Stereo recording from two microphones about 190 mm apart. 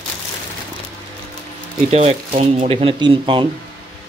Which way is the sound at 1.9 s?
35° right (ahead or behind).